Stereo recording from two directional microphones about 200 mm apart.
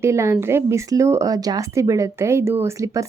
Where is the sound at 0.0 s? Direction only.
15° right (ahead or behind).